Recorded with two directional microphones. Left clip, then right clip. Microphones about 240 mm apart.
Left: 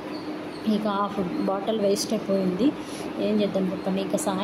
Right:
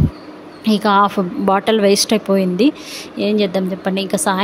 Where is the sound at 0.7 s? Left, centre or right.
Right.